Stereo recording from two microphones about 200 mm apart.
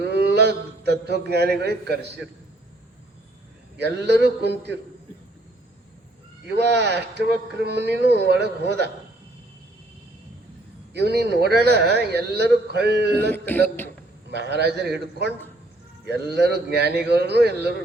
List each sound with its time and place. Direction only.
0.0 s a man's voice: 55° right (ahead or behind)
3.8 s speech: 55° right (ahead or behind)
6.5 s speech: 55° right (ahead or behind)
10.9 s speech: 55° right (ahead or behind)
13.3 s speech: 10° left (ahead or behind)
14.3 s speech: 55° right (ahead or behind)